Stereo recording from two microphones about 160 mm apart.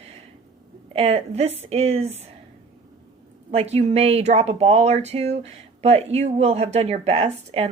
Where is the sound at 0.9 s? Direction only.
40° right (ahead or behind).